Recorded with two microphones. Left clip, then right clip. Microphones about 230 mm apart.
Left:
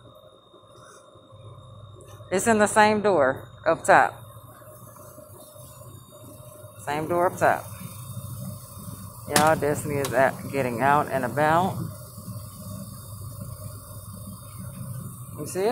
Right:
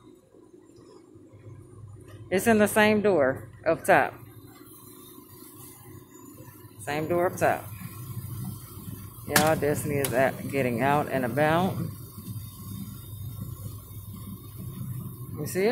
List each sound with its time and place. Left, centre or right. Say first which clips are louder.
2.2 s speech: left 1 dB; centre
6.8 s speech: left 3 dB; centre
9.4 s speech: left 4 dB; centre
15.4 s speech: even; centre